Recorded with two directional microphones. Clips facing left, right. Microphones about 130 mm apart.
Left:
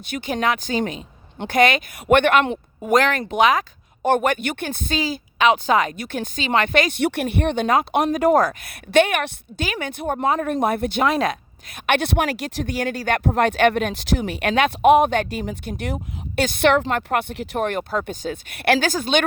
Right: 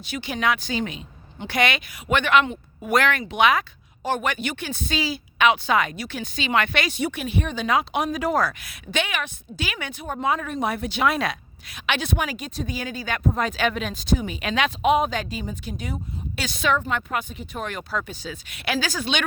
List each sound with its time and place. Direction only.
0.0 s speech: 50° left (ahead or behind)
2.8 s speech: 40° left (ahead or behind)
4.0 s speech: 55° left (ahead or behind)
7.0 s a woman's voice: 65° left (ahead or behind)
11.0 s a woman's voice: 40° left (ahead or behind); by 16.9 s 80° left
16.9 s speech: 60° left (ahead or behind); by 17.6 s 80° left
17.6 s speech: 50° left (ahead or behind)